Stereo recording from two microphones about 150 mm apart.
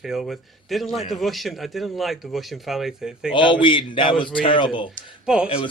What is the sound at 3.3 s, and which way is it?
A man's voice, 35° left (ahead or behind).